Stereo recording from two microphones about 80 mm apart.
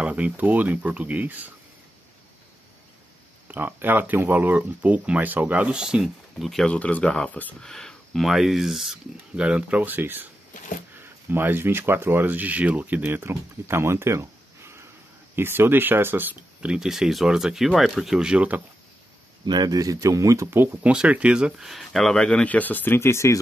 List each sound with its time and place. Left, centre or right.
0.0 s speech: centre
3.4 s speech: right; by 6.5 s centre
6.5 s speech: centre
7.6 s speech: centre
9.4 s speech: centre
16.6 s speech: centre
19.4 s speech: right
20.9 s speech: centre; by 23.4 s left